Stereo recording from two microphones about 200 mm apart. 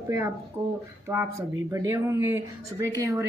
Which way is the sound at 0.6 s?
15° right (ahead or behind).